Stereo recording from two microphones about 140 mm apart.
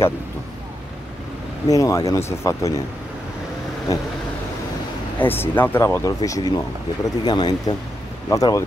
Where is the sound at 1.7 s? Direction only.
20° left (ahead or behind).